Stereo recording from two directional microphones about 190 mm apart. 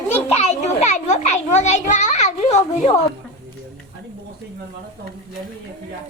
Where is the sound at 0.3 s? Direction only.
35° left (ahead or behind).